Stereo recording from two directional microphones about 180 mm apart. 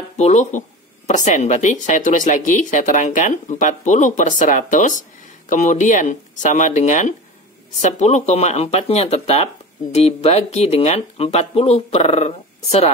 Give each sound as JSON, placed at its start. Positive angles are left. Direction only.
{"t": 0.2, "sound": "speech", "side_deg": 40}